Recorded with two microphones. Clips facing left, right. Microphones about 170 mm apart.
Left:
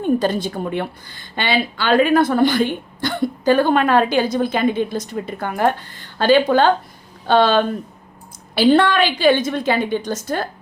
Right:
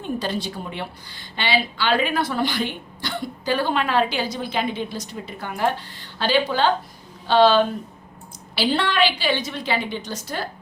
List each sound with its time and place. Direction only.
0.0 s a woman's voice: 50° left (ahead or behind)